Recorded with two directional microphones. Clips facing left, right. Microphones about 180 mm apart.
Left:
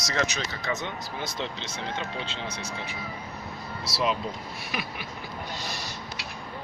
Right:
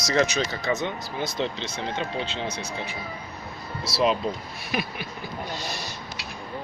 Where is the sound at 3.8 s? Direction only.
30° right (ahead or behind).